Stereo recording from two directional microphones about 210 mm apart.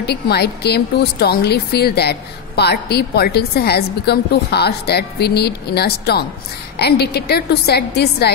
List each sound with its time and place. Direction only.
0.0 s a woman's voice: 50° left (ahead or behind)